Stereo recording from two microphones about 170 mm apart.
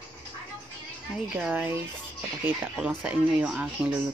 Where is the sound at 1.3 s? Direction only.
10° right (ahead or behind).